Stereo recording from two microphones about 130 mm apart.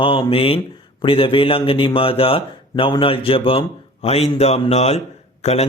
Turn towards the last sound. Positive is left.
turn(degrees=55)  # may be behind; listen again after turning